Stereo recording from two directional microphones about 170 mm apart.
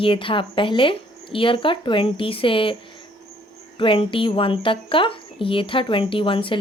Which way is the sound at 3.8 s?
30° left (ahead or behind).